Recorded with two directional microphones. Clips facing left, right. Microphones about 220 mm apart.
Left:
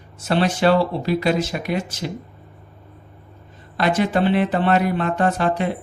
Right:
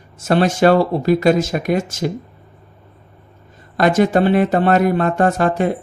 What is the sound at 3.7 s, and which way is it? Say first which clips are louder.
Speech: right 5 dB; 45° right (ahead or behind).